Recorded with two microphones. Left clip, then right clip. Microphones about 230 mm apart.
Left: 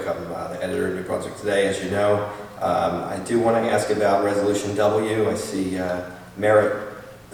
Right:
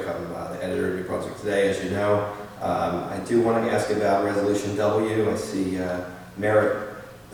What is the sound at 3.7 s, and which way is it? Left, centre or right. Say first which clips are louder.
A man's voice: left 2 dB; centre.